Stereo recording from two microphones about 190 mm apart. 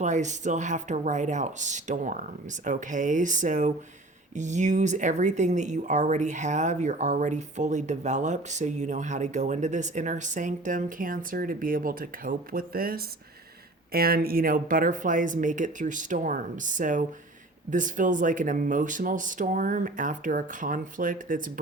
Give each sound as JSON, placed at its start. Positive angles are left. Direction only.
{"t": 0.0, "sound": "speech", "side_deg": -40}